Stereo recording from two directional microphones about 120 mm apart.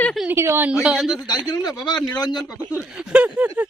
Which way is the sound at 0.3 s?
20° right (ahead or behind).